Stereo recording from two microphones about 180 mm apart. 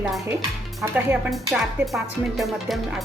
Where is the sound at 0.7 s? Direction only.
5° right (ahead or behind).